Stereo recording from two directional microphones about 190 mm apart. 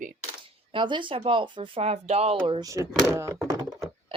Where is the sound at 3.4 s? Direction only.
15° right (ahead or behind).